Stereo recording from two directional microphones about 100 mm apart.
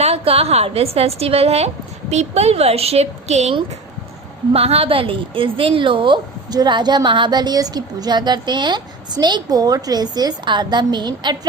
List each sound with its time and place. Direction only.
0.0 s a woman's voice: 85° right; by 6.1 s 55° right (ahead or behind)
6.5 s a woman's voice: 45° right (ahead or behind)